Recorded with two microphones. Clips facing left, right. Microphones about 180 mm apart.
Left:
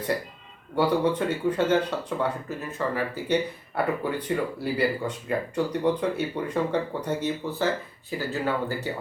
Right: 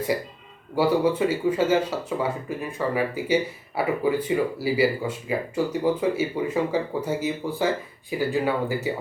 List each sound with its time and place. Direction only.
0.8 s speech: 10° right (ahead or behind)